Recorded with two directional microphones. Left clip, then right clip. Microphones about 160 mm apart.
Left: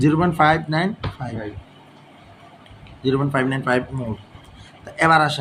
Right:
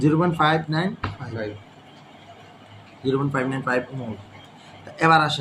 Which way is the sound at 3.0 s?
45° left (ahead or behind).